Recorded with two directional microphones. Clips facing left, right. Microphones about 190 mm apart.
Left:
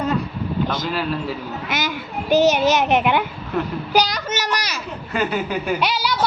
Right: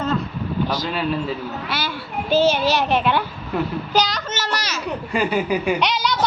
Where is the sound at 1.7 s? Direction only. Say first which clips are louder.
Left 4 dB; 15° left (ahead or behind).